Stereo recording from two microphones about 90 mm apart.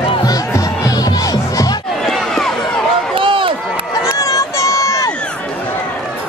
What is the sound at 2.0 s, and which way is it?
Run, 5° left (ahead or behind).